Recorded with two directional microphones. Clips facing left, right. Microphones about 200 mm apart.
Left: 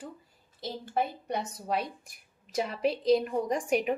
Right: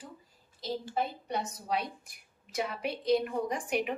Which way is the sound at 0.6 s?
55° left (ahead or behind).